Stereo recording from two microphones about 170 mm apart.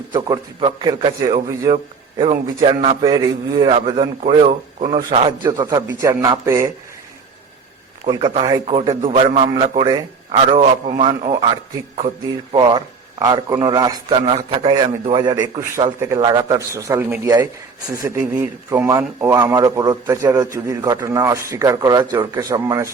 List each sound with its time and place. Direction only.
0.1 s a man's voice: 25° right (ahead or behind)
5.5 s a man's voice: 25° right (ahead or behind)
8.0 s a man's voice: 30° right (ahead or behind)
10.5 s a man's voice: 40° right (ahead or behind)
12.5 s a man's voice: 25° right (ahead or behind)